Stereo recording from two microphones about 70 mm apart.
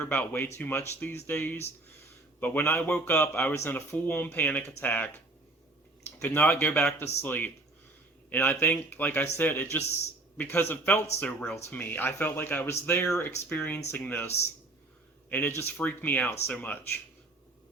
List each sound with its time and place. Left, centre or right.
0.0 s speech: left
6.2 s speech: left
9.2 s speech: left
9.5 s speech: left